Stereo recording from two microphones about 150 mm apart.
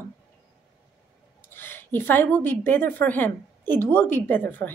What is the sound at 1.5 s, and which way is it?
A woman's voice, 15° left (ahead or behind).